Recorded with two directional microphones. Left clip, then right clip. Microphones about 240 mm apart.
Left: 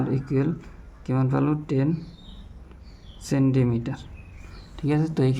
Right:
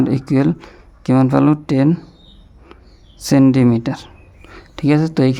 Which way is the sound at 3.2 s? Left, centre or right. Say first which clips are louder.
Right 11 dB; right.